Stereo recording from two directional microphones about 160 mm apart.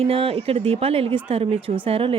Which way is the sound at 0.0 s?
35° right (ahead or behind).